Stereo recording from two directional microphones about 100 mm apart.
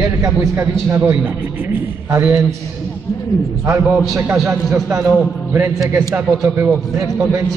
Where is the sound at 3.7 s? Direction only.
30° right (ahead or behind).